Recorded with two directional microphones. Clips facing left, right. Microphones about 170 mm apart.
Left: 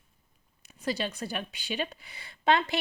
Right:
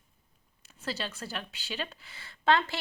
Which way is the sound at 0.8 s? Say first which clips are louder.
Left 5 dB; 15° left (ahead or behind).